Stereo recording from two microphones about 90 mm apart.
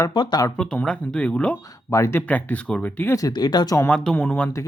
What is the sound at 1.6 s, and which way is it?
Speech, 40° left (ahead or behind).